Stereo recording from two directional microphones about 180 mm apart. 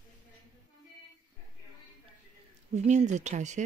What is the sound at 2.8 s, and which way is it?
Speech, 40° right (ahead or behind).